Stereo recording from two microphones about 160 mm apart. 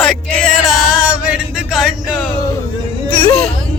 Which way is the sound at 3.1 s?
30° left (ahead or behind).